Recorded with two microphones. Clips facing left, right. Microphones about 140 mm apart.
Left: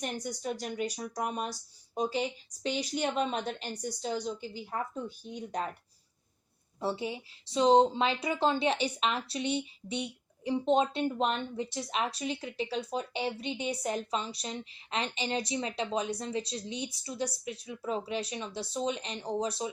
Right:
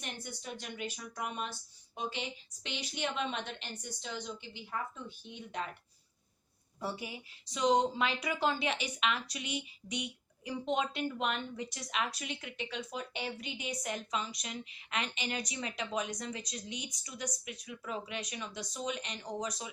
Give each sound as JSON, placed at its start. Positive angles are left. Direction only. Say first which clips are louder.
{"t": 0.0, "sound": "speech", "louder": "left 9 dB", "side_deg": 40}
{"t": 6.7, "sound": "speech", "louder": "left 6 dB", "side_deg": 25}